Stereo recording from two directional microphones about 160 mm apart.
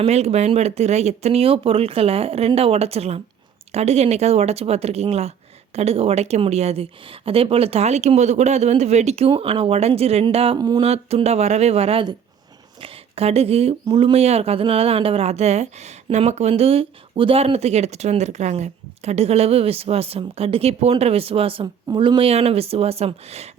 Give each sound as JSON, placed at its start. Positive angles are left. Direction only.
{"t": 0.0, "sound": "speech", "side_deg": -40}
{"t": 10.6, "sound": "a sound", "side_deg": -25}
{"t": 10.8, "sound": "speech", "side_deg": -40}